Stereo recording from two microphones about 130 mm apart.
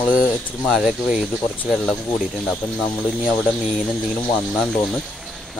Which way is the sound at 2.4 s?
5° left (ahead or behind).